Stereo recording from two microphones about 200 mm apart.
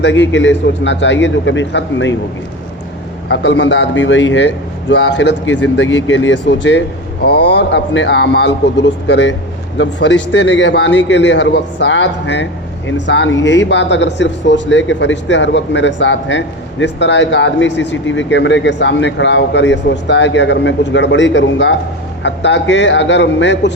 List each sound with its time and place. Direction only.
0.0 s speech: 65° left (ahead or behind)
3.2 s speech: 60° left (ahead or behind)